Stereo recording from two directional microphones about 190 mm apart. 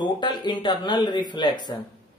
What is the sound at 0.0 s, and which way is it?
Speech, 25° left (ahead or behind).